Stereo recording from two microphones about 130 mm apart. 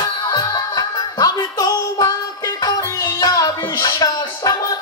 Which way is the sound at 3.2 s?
30° left (ahead or behind).